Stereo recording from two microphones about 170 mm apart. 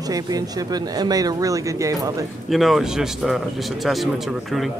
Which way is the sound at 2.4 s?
Centre (ahead or behind).